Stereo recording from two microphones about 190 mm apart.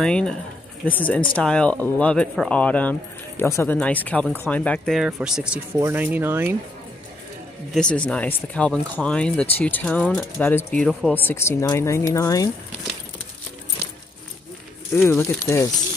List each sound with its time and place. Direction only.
0.0 s speech: 5° left (ahead or behind)
5.8 s speech: 15° right (ahead or behind)
7.7 s speech: 5° left (ahead or behind)
15.0 s speech: 10° left (ahead or behind)